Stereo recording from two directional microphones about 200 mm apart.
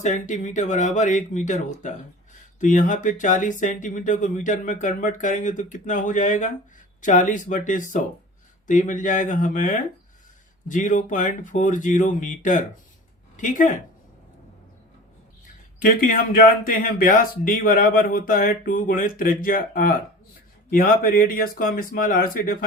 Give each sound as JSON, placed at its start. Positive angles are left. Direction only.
{"t": 0.0, "sound": "speech", "side_deg": 40}
{"t": 15.8, "sound": "speech", "side_deg": 45}